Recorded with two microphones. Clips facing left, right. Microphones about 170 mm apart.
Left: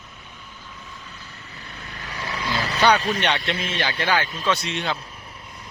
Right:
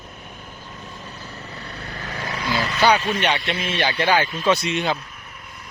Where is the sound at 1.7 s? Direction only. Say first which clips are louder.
Right 3 dB; 40° right (ahead or behind).